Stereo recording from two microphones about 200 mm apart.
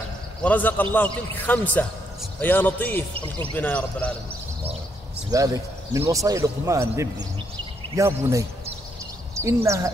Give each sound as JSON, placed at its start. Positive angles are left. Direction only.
{"t": 0.4, "sound": "a man's voice", "side_deg": 10}
{"t": 3.2, "sound": "speech", "side_deg": -30}
{"t": 3.5, "sound": "a man's voice", "side_deg": 10}
{"t": 5.3, "sound": "speech", "side_deg": -15}